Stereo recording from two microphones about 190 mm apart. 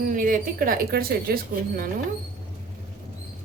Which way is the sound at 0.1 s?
45° right (ahead or behind).